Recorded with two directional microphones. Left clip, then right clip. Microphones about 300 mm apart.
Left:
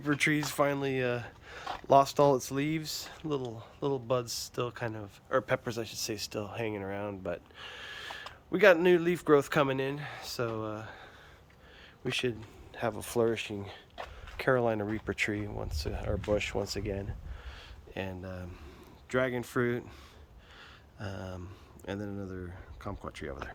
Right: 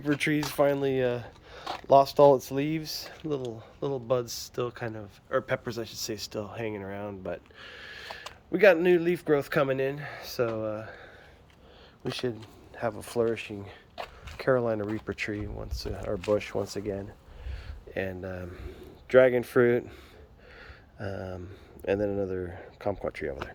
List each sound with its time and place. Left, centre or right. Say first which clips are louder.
0.2 s speech: right 2 dB; centre
12.0 s speech: left 1 dB; right
12.7 s speech: right 2 dB; centre
13.9 s a sound: right 8 dB; right
14.3 s speech: right 2 dB; centre